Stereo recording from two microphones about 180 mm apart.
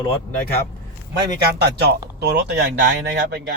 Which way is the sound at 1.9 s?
65° right (ahead or behind).